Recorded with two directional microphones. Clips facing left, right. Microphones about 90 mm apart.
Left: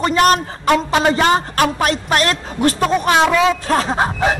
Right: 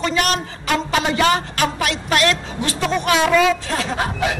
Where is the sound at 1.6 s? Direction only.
40° left (ahead or behind).